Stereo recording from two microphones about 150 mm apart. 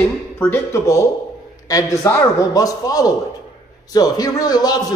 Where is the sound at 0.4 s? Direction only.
20° left (ahead or behind).